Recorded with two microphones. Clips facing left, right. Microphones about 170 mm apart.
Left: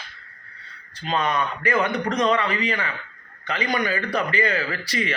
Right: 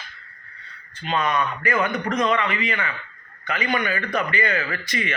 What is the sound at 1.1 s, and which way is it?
A man's voice, 35° left (ahead or behind).